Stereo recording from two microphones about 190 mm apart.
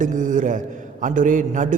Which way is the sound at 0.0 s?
40° right (ahead or behind).